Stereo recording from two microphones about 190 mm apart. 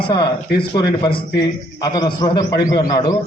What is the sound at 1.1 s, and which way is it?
Speech, 60° left (ahead or behind).